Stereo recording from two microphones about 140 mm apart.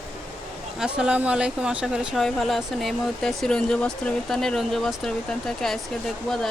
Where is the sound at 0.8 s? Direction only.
5° right (ahead or behind).